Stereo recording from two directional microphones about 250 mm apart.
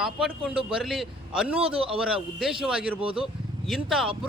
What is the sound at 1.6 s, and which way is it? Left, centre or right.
Speech, right.